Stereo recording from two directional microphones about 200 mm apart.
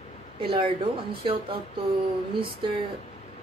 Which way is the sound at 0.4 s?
25° right (ahead or behind).